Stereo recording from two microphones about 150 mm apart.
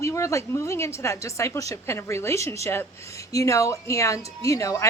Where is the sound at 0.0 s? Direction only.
20° left (ahead or behind).